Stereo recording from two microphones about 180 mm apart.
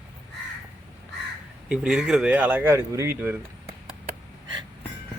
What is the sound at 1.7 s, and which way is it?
Speech, 5° right (ahead or behind).